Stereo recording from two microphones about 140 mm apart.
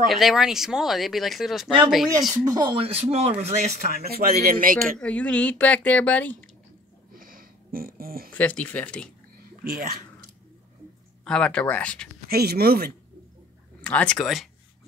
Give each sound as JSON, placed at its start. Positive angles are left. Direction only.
{"t": 0.1, "sound": "speech", "side_deg": 0}
{"t": 2.3, "sound": "speech", "side_deg": -25}
{"t": 4.0, "sound": "a man's voice", "side_deg": -90}
{"t": 4.9, "sound": "a woman's voice", "side_deg": 10}
{"t": 7.1, "sound": "a sound", "side_deg": -90}
{"t": 8.3, "sound": "a woman's voice", "side_deg": 10}
{"t": 9.7, "sound": "speech", "side_deg": -90}
{"t": 11.2, "sound": "a woman's voice", "side_deg": 5}
{"t": 12.3, "sound": "a man's voice", "side_deg": -90}
{"t": 13.8, "sound": "a woman's voice", "side_deg": 5}